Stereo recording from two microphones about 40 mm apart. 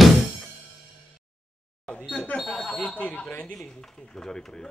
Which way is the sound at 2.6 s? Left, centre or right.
Centre.